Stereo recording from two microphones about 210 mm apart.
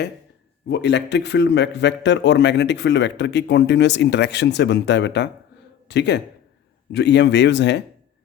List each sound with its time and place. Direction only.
0.7 s a man's voice: 55° left (ahead or behind)